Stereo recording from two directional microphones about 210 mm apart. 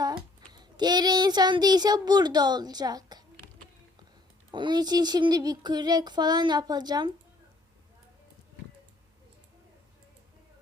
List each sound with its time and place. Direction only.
0.0 s a child's voice: 20° right (ahead or behind)
4.5 s speech: 20° right (ahead or behind)